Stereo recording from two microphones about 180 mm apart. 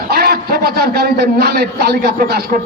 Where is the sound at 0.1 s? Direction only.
60° right (ahead or behind).